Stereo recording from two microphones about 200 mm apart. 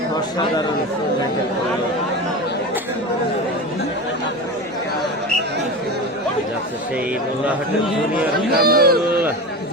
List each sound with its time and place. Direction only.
8.5 s speech: 50° right (ahead or behind)